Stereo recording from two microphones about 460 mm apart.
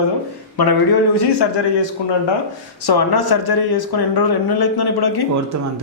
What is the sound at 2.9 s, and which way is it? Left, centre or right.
Speech, left.